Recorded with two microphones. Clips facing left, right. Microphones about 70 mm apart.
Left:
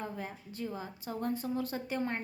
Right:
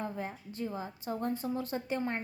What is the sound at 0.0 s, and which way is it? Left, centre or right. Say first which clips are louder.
A woman's voice: right 2 dB; right.